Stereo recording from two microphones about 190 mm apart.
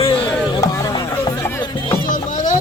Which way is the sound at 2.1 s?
40° left (ahead or behind).